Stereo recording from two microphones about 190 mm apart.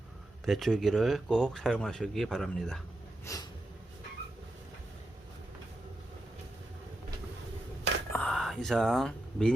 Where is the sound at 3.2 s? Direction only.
20° left (ahead or behind).